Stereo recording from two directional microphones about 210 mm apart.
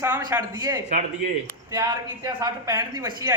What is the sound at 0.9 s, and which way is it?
Speech, 35° right (ahead or behind).